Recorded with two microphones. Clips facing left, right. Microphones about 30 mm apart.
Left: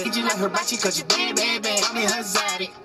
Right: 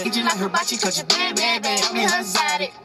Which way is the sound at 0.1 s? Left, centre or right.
Right.